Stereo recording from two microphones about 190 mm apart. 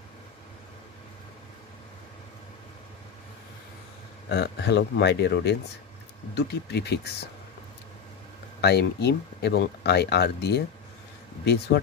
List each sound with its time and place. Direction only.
4.3 s speech: 60° left (ahead or behind)
8.5 s speech: 60° left (ahead or behind)